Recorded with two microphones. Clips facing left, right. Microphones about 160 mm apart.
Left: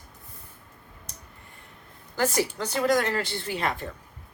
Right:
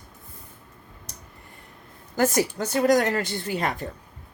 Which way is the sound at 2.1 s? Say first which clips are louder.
Right 3 dB; 45° right (ahead or behind).